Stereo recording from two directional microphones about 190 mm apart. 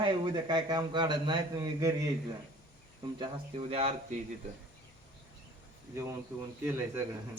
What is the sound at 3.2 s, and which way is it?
Speech, 30° right (ahead or behind).